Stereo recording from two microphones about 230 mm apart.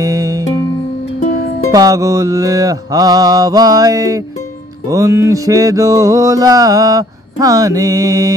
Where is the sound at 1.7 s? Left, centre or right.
Centre.